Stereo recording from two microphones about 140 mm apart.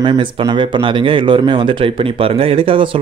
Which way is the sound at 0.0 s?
35° right (ahead or behind).